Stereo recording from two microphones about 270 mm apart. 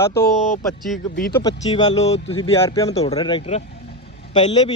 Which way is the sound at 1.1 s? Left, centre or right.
Left.